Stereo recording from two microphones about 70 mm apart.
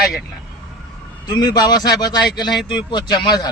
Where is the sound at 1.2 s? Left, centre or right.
Left.